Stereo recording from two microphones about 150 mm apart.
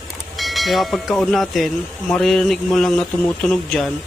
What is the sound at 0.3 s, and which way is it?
Speech, centre (ahead or behind).